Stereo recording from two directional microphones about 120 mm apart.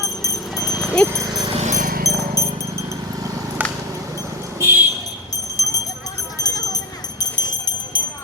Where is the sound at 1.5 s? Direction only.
90° right.